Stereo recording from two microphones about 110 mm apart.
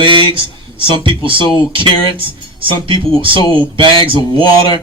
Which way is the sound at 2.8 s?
50° right (ahead or behind).